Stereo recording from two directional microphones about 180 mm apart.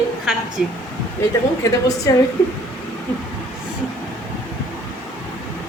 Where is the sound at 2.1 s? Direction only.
15° left (ahead or behind).